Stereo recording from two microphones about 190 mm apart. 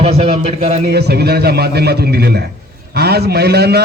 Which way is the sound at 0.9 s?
60° right (ahead or behind).